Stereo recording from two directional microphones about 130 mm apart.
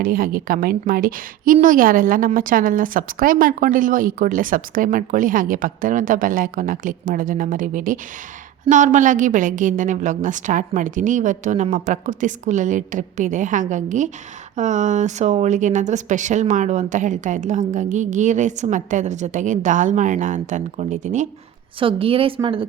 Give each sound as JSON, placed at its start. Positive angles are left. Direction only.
{"t": 0.0, "sound": "a woman's voice", "side_deg": -90}
{"t": 8.7, "sound": "a woman's voice", "side_deg": -75}
{"t": 21.8, "sound": "a woman's voice", "side_deg": -45}